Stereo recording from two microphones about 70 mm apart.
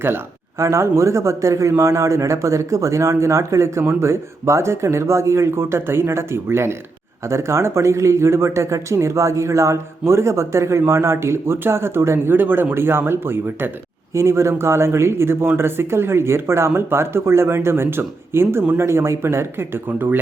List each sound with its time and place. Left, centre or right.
0.6 s a man's voice: right